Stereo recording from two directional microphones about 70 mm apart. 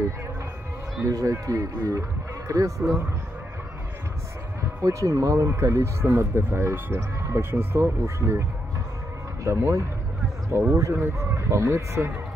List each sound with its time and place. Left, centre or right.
1.0 s speech: right
4.8 s speech: right